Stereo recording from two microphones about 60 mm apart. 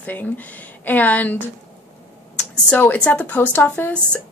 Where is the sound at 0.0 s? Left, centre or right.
Left.